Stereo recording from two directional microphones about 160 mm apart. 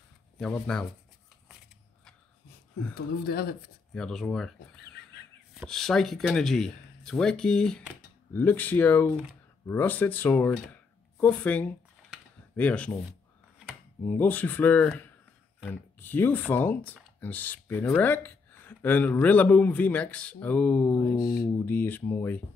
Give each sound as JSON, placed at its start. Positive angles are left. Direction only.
{"t": 0.4, "sound": "speech", "side_deg": 5}
{"t": 2.9, "sound": "speech", "side_deg": 70}
{"t": 3.9, "sound": "speech", "side_deg": 5}
{"t": 14.0, "sound": "speech", "side_deg": 10}
{"t": 21.2, "sound": "speech", "side_deg": 70}
{"t": 21.6, "sound": "speech", "side_deg": 10}